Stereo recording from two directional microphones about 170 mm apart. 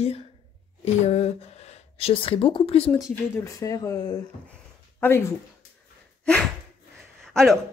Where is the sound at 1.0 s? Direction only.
40° left (ahead or behind).